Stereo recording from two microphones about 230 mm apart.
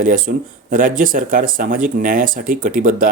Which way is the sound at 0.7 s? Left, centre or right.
Right.